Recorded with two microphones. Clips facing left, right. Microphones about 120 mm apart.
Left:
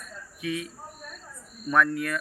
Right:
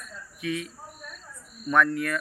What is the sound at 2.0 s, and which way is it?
Speech, 25° left (ahead or behind).